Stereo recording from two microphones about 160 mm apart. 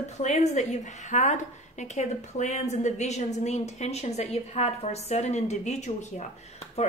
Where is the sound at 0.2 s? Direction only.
45° left (ahead or behind).